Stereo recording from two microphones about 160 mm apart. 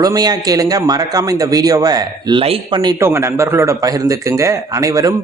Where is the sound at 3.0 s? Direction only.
15° right (ahead or behind).